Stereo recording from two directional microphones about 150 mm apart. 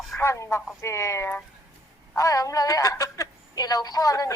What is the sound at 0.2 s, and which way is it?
A woman's voice, 15° left (ahead or behind).